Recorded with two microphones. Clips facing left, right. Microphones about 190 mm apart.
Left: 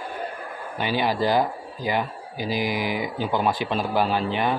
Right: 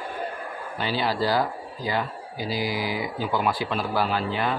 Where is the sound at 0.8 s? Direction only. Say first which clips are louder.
Left 2 dB; 15° left (ahead or behind).